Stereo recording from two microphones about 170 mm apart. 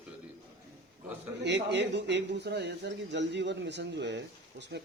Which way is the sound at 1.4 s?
90° right.